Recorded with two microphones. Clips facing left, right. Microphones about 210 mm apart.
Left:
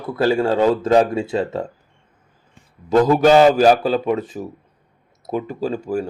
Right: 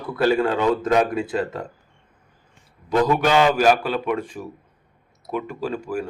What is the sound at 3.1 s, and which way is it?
A man's voice, 40° left (ahead or behind).